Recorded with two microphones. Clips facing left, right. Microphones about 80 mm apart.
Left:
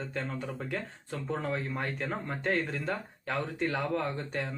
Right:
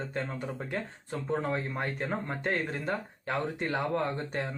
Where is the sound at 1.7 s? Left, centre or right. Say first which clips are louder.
Right 1 dB; centre.